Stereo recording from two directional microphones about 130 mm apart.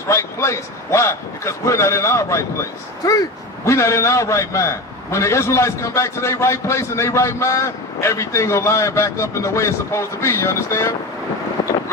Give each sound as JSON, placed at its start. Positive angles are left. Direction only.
{"t": 0.1, "sound": "a man's voice", "side_deg": 20}